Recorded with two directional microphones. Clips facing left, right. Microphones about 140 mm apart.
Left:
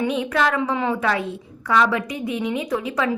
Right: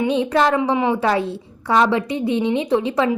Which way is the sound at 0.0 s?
30° right (ahead or behind).